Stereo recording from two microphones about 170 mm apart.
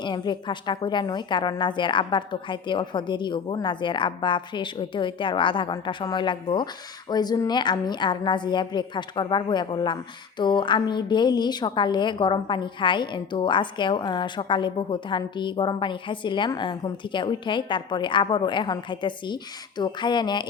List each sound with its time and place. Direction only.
0.0 s a woman's voice: 25° left (ahead or behind)